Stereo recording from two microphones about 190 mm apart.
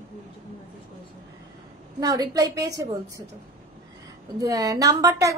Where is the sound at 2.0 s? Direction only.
20° right (ahead or behind).